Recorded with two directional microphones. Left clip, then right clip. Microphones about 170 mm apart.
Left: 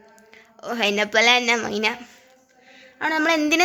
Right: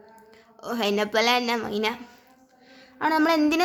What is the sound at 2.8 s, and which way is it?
Speech, 5° right (ahead or behind).